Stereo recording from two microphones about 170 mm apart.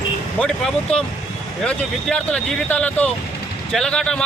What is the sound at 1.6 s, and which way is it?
A man's voice, 5° left (ahead or behind).